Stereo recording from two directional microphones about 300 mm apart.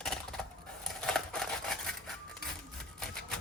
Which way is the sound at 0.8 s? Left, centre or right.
Centre.